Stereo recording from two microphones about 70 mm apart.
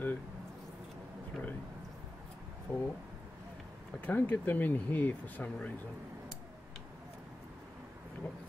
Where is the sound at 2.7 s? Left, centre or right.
Left.